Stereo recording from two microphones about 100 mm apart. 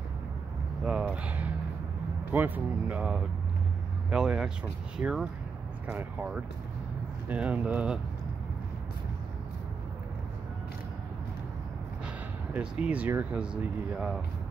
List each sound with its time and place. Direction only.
0.8 s speech: 10° right (ahead or behind)
4.1 s speech: 10° right (ahead or behind)
7.2 s speech: 15° right (ahead or behind)
12.8 s speech: 15° right (ahead or behind)